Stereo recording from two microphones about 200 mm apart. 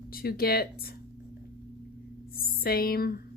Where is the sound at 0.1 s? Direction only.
50° left (ahead or behind).